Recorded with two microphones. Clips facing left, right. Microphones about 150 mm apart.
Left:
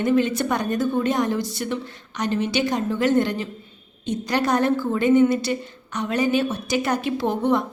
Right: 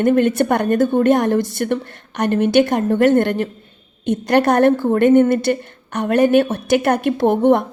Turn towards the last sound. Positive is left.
turn(degrees=-55)  # may be behind; listen again after turning